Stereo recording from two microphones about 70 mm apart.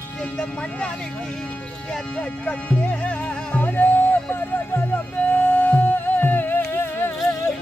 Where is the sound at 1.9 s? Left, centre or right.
Centre; by 7.1 s left.